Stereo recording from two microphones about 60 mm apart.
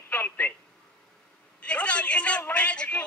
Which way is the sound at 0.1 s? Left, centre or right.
Left.